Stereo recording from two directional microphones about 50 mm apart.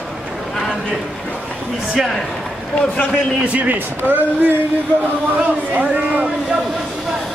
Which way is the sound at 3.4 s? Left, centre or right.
Right.